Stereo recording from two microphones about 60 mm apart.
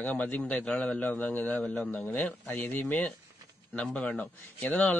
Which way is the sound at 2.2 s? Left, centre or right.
Left.